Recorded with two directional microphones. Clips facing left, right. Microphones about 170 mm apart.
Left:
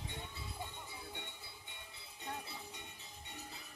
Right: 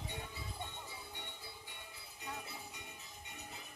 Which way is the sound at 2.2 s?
30° left (ahead or behind).